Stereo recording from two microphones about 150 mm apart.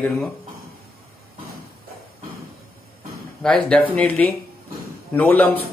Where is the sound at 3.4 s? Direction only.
5° left (ahead or behind).